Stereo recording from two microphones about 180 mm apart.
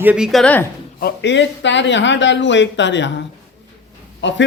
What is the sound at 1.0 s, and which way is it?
Speech, 70° left (ahead or behind).